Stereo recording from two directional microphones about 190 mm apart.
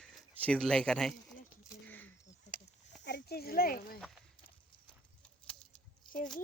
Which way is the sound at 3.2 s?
55° left (ahead or behind).